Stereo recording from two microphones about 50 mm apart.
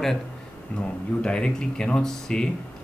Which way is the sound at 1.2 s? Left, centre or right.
Centre.